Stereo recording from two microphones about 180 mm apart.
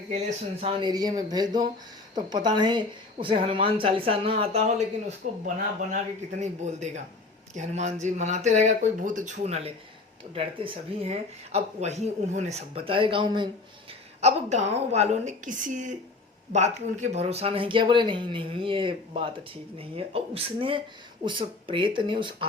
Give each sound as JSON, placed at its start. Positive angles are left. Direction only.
{"t": 0.1, "sound": "speech", "side_deg": -35}
{"t": 6.4, "sound": "speech", "side_deg": -40}
{"t": 14.2, "sound": "speech", "side_deg": -35}